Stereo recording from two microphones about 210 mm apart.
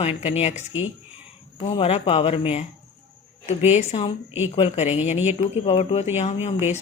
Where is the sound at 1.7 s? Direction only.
30° left (ahead or behind).